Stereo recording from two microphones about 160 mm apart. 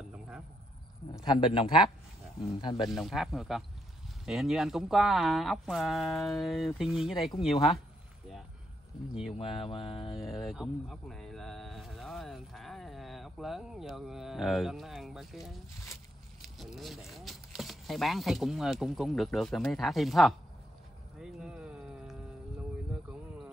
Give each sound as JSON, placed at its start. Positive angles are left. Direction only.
{"t": 1.2, "sound": "speech", "side_deg": 30}
{"t": 2.9, "sound": "speech", "side_deg": 0}
{"t": 7.3, "sound": "speech", "side_deg": 35}
{"t": 9.4, "sound": "speech", "side_deg": 35}
{"t": 10.1, "sound": "a man's voice", "side_deg": 0}
{"t": 21.2, "sound": "a sound", "side_deg": -5}